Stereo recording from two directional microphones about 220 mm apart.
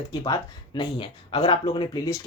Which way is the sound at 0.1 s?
20° left (ahead or behind).